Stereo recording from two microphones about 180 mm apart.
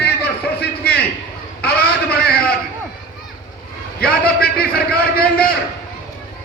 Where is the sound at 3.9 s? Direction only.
60° left (ahead or behind).